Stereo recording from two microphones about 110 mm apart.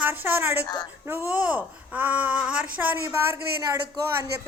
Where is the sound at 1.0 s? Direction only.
15° right (ahead or behind).